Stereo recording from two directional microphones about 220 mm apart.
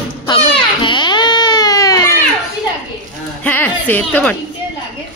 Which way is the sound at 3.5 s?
10° left (ahead or behind).